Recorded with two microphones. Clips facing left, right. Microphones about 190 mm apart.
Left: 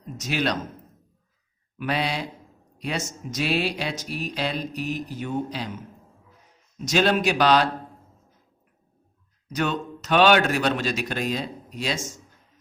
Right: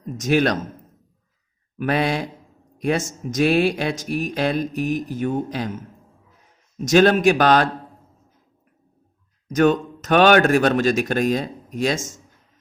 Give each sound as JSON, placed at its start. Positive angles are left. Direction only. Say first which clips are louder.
{"t": 0.0, "sound": "speech", "louder": "right 7 dB", "side_deg": -50}
{"t": 1.8, "sound": "speech", "louder": "right 5 dB", "side_deg": -50}
{"t": 9.5, "sound": "speech", "louder": "right 9 dB", "side_deg": -50}